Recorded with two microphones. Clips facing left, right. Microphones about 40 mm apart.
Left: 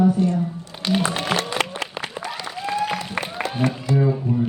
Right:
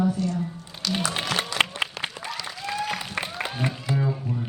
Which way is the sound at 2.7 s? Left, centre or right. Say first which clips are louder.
Left 5 dB; centre.